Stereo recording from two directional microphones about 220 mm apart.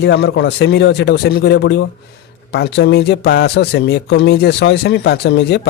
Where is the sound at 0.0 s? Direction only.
55° left (ahead or behind).